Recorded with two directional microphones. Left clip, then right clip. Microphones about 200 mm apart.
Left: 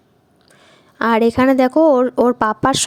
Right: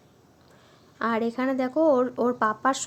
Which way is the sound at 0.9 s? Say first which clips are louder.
Left 12 dB; 45° left (ahead or behind).